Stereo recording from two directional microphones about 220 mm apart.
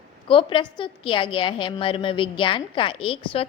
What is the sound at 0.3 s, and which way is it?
A woman's voice, 25° left (ahead or behind).